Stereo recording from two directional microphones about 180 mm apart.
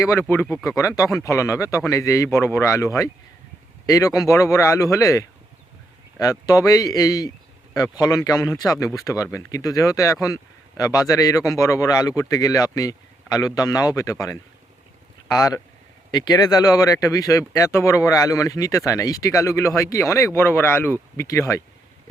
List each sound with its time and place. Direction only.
0.0 s speech: 15° left (ahead or behind)
6.4 s a man's voice: 20° left (ahead or behind)